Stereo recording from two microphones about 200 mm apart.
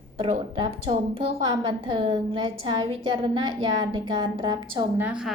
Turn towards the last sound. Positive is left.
turn(degrees=-5)  # may be behind; listen again after turning